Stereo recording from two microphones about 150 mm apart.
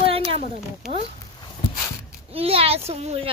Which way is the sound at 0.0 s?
40° right (ahead or behind).